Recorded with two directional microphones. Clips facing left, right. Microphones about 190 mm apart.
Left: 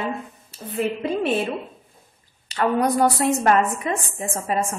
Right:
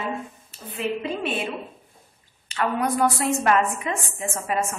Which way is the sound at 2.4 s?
35° left (ahead or behind).